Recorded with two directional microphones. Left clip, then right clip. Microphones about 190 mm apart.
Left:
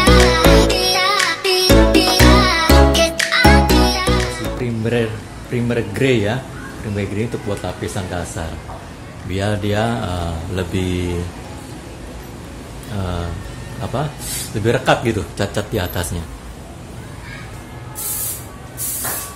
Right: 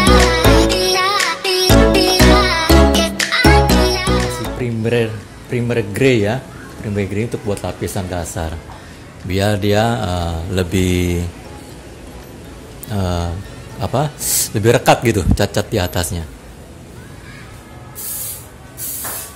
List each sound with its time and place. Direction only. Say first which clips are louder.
0.0 s music: even; centre (ahead or behind)
4.6 s music: right 3 dB; 45° right (ahead or behind)
5.5 s speech: right 2 dB; 45° right (ahead or behind)
12.9 s speech: right 4 dB; 45° right (ahead or behind)